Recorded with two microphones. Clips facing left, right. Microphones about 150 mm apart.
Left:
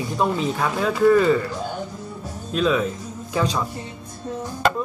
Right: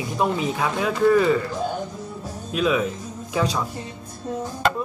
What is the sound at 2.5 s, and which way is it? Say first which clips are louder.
Speech: left 1 dB; 5° right (ahead or behind).